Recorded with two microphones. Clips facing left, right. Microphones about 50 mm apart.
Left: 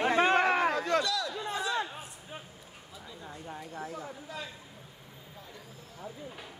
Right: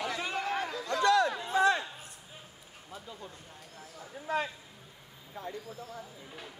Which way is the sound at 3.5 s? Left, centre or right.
Left.